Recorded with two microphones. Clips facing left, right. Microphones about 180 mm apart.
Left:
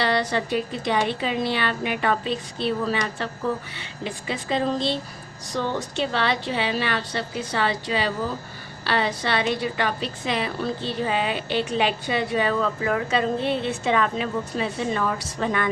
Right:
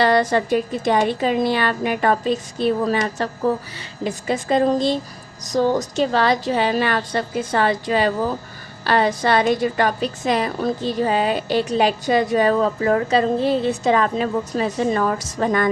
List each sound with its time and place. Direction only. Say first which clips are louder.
0.0 s a woman's voice: right 6 dB; 45° right (ahead or behind)